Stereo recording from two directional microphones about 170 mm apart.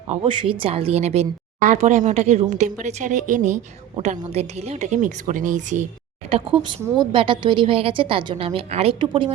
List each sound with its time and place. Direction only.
0.3 s a woman's voice: 30° right (ahead or behind); by 5.8 s 45° right (ahead or behind)
6.8 s a woman's voice: 25° right (ahead or behind)